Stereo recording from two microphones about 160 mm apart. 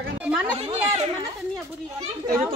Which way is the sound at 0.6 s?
40° right (ahead or behind).